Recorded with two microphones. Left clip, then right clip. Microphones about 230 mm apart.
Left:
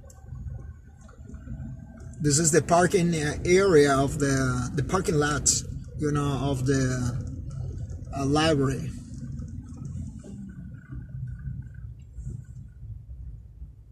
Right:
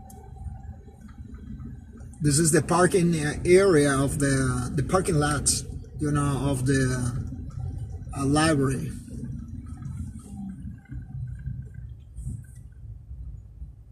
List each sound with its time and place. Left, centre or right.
2.2 s speech: left